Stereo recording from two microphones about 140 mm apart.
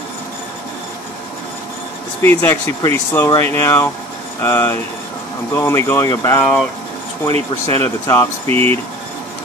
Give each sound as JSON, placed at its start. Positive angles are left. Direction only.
{"t": 2.2, "sound": "speech", "side_deg": 15}
{"t": 6.4, "sound": "speech", "side_deg": 5}
{"t": 7.7, "sound": "speech", "side_deg": 20}
{"t": 8.5, "sound": "speech", "side_deg": -45}